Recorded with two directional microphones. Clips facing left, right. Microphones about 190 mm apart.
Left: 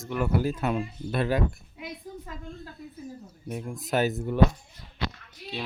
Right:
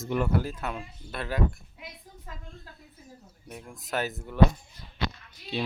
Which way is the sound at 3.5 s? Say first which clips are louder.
Left 6 dB; 15° left (ahead or behind).